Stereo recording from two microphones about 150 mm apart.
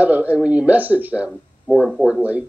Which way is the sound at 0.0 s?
10° right (ahead or behind).